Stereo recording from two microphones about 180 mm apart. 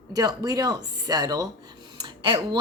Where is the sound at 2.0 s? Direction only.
25° right (ahead or behind).